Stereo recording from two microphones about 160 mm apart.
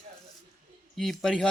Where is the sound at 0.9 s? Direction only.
Centre (ahead or behind).